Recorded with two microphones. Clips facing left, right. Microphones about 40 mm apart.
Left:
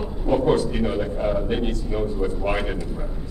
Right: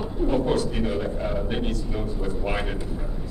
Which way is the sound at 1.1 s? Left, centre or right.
Centre.